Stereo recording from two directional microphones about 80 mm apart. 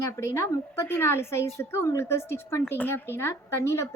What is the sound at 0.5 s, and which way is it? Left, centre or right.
A woman's voice, left.